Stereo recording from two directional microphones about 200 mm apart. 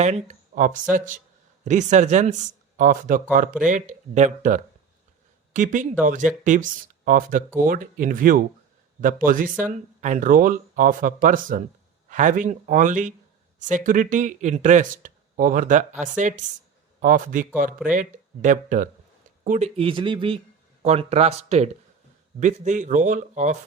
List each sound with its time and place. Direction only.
0.0 s a man's voice: 35° right (ahead or behind)